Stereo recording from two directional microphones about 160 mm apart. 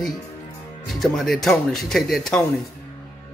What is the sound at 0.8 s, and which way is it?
A man's voice, centre (ahead or behind).